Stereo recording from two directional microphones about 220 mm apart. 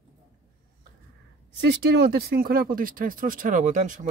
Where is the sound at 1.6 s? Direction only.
50° right (ahead or behind).